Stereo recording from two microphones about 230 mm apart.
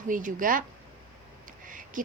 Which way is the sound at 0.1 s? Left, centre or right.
Right.